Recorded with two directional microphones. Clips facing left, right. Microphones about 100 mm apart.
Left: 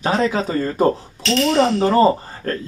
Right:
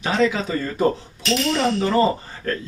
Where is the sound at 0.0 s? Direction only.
40° left (ahead or behind).